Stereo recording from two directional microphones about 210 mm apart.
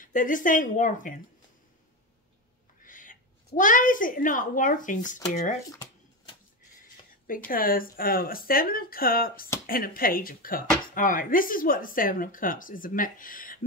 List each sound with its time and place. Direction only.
0.0 s speech: 40° left (ahead or behind)
2.8 s a woman's voice: 40° left (ahead or behind)
5.7 s a sound: 15° left (ahead or behind)
7.2 s speech: 40° left (ahead or behind)